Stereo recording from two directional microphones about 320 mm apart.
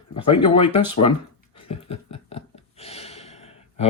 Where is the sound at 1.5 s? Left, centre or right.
Centre.